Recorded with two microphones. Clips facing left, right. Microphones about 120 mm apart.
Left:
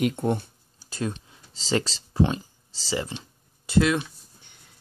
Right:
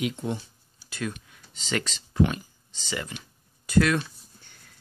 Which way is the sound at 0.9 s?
30° left (ahead or behind).